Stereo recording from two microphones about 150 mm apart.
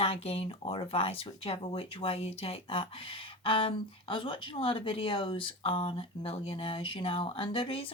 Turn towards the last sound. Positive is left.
turn(degrees=40)  # may be behind; listen again after turning